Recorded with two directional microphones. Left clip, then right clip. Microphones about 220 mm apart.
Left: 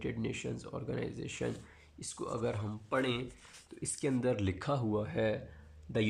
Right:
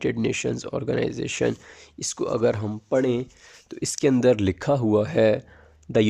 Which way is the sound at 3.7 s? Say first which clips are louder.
Right 14 dB; 45° right (ahead or behind).